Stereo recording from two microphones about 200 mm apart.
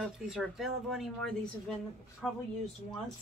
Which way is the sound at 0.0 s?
Centre (ahead or behind).